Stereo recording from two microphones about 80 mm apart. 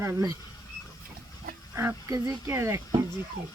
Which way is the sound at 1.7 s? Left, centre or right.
Right.